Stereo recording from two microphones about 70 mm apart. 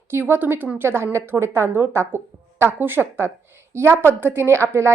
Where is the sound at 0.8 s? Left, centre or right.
Right.